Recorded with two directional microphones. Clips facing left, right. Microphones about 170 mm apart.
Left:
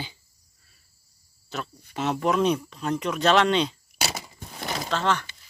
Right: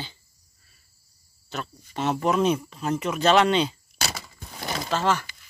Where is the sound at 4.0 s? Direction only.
15° left (ahead or behind).